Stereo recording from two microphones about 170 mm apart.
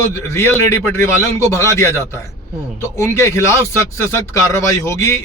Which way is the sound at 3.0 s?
15° left (ahead or behind).